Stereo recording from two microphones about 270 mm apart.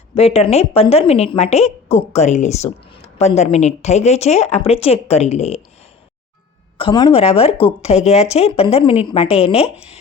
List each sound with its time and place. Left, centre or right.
0.1 s speech: left
6.7 s speech: centre